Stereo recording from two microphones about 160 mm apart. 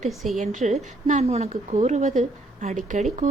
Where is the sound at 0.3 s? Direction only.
50° right (ahead or behind).